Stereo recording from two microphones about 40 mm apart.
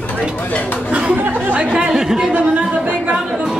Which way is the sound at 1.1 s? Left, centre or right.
Right.